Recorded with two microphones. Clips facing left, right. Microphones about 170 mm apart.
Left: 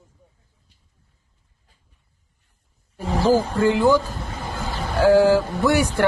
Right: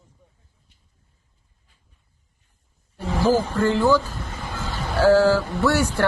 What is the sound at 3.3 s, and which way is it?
A man's voice, 10° left (ahead or behind).